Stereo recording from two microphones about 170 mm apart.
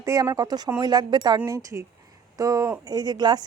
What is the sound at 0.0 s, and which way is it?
Speech, 15° right (ahead or behind).